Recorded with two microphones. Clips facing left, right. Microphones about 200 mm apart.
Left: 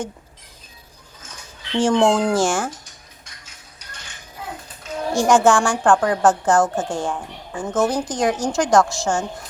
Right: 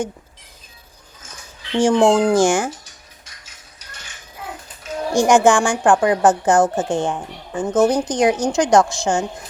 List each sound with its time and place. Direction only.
1.7 s a woman's voice: 10° right (ahead or behind)
5.1 s a woman's voice: 15° right (ahead or behind)